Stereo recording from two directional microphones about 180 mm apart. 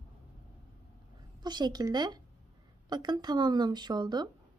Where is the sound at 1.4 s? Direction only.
25° right (ahead or behind).